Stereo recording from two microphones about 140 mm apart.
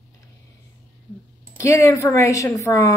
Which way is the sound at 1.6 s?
20° left (ahead or behind).